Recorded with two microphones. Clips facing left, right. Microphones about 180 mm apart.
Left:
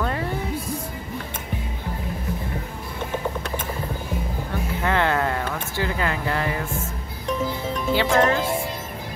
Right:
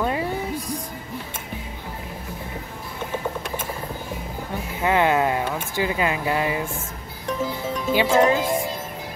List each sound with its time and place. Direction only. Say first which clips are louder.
0.0 s music: right 2 dB; 15° right (ahead or behind)
4.8 s a sound: right 3 dB; 15° right (ahead or behind)
7.9 s speech: right 2 dB; 15° right (ahead or behind)